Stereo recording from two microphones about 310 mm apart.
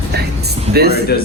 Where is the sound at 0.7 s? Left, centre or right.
Right.